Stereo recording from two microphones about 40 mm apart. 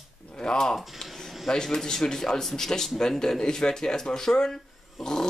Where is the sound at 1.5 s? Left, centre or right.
Centre.